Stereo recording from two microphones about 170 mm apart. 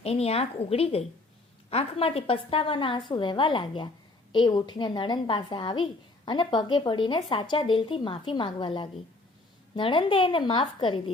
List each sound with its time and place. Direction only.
0.0 s a woman's voice: 35° left (ahead or behind)